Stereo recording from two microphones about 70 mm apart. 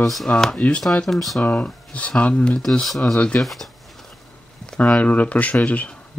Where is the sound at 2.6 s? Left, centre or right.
Centre.